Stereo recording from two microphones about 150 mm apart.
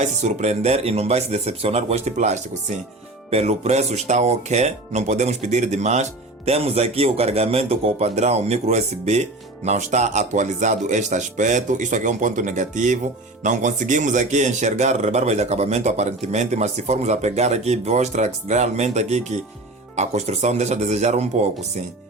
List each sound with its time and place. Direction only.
0.0 s speech: 50° right (ahead or behind)